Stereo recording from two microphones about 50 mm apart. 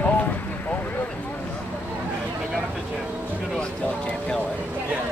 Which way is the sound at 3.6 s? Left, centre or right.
Left.